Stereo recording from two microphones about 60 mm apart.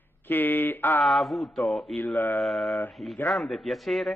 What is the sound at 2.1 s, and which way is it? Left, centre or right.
Speech, left.